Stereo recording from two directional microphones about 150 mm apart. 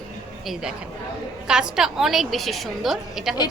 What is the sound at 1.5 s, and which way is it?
Speech, 5° right (ahead or behind).